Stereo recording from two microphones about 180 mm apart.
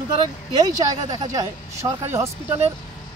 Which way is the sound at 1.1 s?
20° right (ahead or behind).